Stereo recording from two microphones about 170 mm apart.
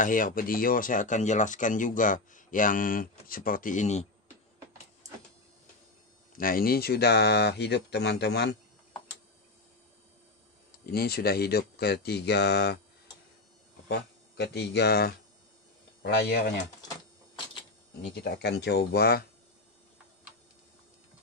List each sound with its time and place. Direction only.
0.0 s speech: 55° left (ahead or behind)
6.3 s speech: 55° left (ahead or behind); by 8.5 s 75° left (ahead or behind)
10.9 s speech: 65° left (ahead or behind)
13.8 s speech: 80° left
18.1 s speech: 75° left (ahead or behind)